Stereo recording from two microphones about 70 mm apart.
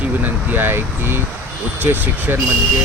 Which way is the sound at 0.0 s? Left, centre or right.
Right.